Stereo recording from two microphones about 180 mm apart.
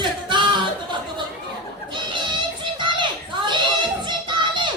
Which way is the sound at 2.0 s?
25° right (ahead or behind).